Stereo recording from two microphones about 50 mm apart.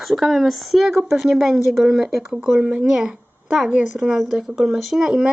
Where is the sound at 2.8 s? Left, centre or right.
Centre.